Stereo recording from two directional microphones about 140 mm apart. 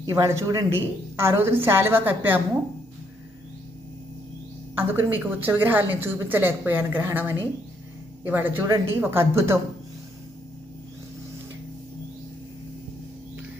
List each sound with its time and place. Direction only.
0.1 s a woman's voice: 20° right (ahead or behind)
4.8 s a woman's voice: 15° right (ahead or behind)